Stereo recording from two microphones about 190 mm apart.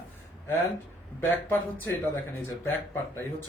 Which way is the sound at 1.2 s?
10° left (ahead or behind).